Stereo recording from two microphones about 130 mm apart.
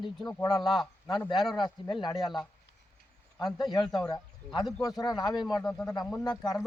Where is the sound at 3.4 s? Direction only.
30° left (ahead or behind).